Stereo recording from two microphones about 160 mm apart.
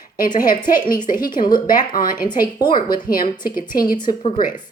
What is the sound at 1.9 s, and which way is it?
A woman's voice, 60° left (ahead or behind).